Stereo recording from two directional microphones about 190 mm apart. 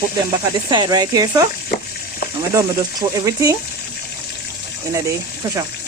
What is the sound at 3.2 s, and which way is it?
Speech, 15° right (ahead or behind).